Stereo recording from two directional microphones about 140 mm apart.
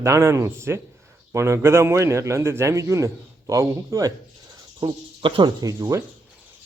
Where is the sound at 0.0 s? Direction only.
20° right (ahead or behind).